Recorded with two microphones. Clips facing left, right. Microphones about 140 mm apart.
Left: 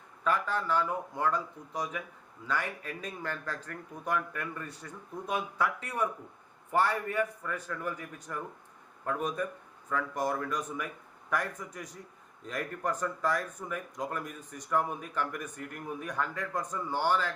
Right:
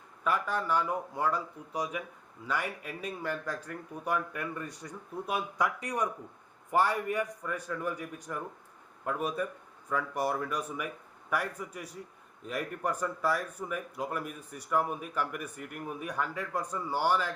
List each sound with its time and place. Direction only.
0.3 s speech: 10° right (ahead or behind)